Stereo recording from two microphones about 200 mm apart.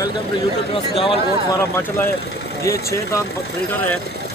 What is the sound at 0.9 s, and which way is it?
Speech, 25° left (ahead or behind).